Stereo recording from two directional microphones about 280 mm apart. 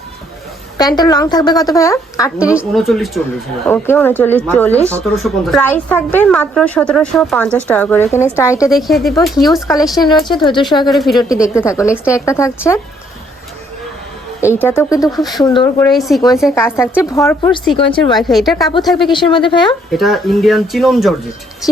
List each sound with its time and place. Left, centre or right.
0.8 s speech: centre
2.4 s speech: centre
8.7 s speech: centre
9.9 s speech: centre
10.8 s speech: centre
11.3 s speech: centre
14.4 s speech: centre
15.0 s speech: centre
15.4 s speech: centre
15.9 s speech: centre
18.2 s speech: centre
19.1 s speech: centre
19.9 s speech: centre